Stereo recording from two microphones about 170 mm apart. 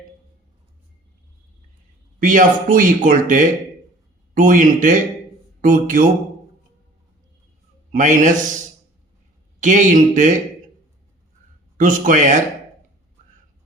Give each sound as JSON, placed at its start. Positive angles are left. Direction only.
{"t": 2.1, "sound": "speech", "side_deg": -50}
{"t": 7.9, "sound": "speech", "side_deg": -45}
{"t": 9.6, "sound": "speech", "side_deg": -45}
{"t": 11.8, "sound": "speech", "side_deg": -50}